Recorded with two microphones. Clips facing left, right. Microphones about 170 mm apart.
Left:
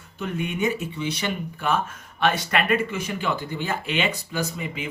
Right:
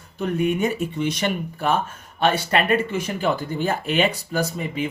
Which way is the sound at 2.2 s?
30° right (ahead or behind).